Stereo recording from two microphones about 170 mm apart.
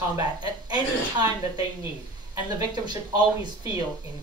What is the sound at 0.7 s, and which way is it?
Speech, 25° right (ahead or behind).